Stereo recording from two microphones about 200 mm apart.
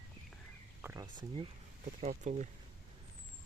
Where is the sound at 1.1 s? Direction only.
25° right (ahead or behind).